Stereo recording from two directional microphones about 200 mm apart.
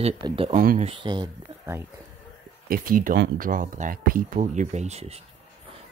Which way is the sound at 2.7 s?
45° right (ahead or behind).